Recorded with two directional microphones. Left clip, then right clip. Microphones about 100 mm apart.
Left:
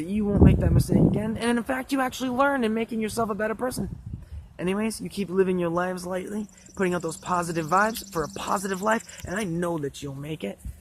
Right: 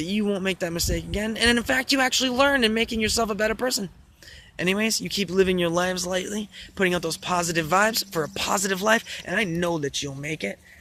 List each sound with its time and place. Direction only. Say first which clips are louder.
0.0 s speech: left 2 dB; 10° right (ahead or behind)